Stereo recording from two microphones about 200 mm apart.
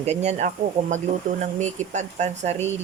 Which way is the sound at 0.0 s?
35° right (ahead or behind).